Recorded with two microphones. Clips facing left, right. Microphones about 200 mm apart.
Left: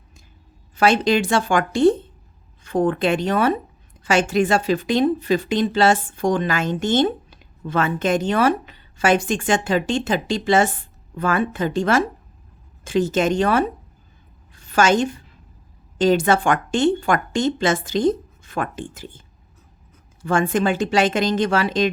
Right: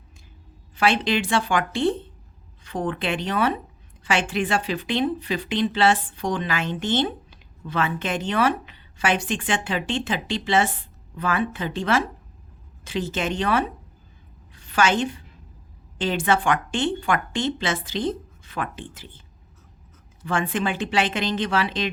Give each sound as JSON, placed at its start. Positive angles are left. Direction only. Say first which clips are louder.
{"t": 0.8, "sound": "a woman's voice", "louder": "left 5 dB", "side_deg": 45}
{"t": 20.2, "sound": "speech", "louder": "left 6 dB", "side_deg": 45}